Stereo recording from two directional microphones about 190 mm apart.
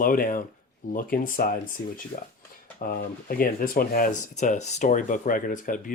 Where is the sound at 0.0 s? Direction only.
50° left (ahead or behind).